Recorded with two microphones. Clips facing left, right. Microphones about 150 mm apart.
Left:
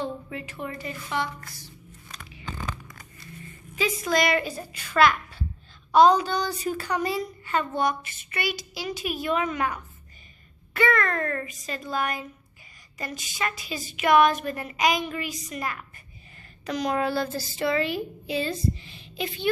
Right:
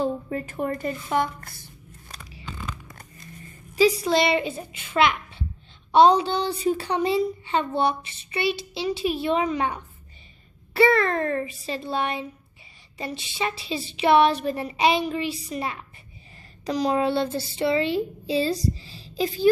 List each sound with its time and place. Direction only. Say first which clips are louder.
0.0 s a woman's voice: right 6 dB; 40° right (ahead or behind)
3.7 s a woman's voice: right 6 dB; 35° right (ahead or behind)